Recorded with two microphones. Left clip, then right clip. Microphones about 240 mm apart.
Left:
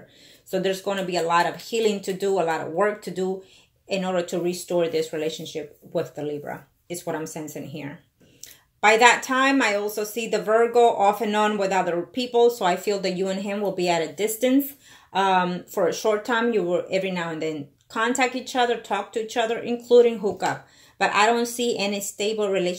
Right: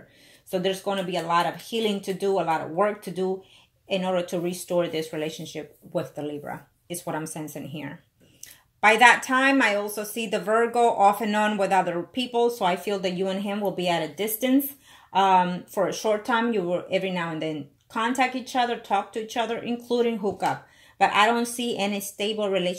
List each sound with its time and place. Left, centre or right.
0.5 s speech: right